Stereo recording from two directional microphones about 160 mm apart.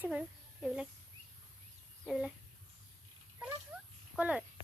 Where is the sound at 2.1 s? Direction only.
Centre (ahead or behind).